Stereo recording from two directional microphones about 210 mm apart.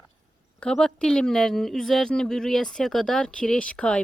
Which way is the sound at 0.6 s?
5° left (ahead or behind).